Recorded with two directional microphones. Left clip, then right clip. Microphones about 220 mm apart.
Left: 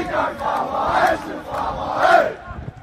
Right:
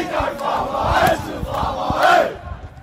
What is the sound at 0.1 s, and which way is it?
Crowd, 40° right (ahead or behind).